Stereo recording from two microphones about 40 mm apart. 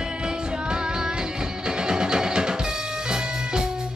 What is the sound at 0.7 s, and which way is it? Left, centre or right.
Music, centre.